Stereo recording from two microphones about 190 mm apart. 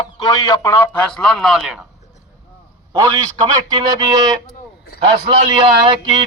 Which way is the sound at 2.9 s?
20° right (ahead or behind).